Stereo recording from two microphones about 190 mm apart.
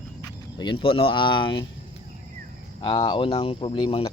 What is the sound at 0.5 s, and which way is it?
Speech, 25° left (ahead or behind).